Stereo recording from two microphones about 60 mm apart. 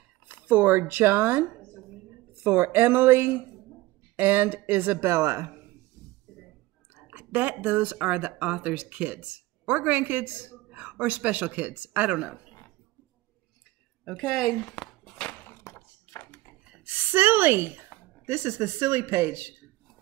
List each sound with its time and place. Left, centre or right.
0.3 s speech: right
5.0 s speech: right
6.9 s speech: right
14.2 s speech: centre
14.6 s a sound: centre
15.3 s a sound: left
16.8 s a woman's voice: right